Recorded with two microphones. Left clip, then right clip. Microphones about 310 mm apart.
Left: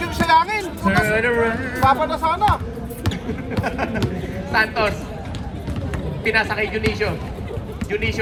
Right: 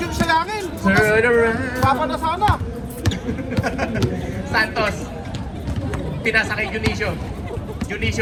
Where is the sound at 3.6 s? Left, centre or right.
Left.